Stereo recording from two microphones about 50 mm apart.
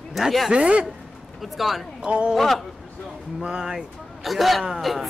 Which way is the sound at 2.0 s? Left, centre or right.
Right.